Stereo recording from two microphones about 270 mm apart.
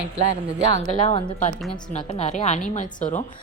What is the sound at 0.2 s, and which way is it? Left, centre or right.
Speech, right.